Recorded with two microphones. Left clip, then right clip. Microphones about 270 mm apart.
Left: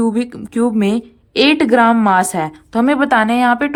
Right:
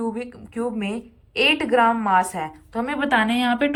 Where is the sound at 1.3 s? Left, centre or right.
Left.